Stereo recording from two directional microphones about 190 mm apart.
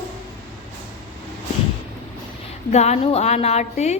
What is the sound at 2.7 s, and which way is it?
A woman's voice, 35° left (ahead or behind).